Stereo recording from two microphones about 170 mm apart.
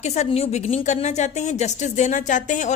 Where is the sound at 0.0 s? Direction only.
40° left (ahead or behind).